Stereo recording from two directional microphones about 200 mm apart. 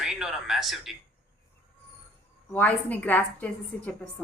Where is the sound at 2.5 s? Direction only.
10° left (ahead or behind).